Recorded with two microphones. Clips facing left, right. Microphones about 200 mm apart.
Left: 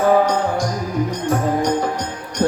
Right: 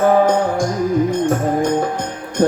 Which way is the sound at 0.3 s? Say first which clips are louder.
Right 3 dB; 50° right (ahead or behind).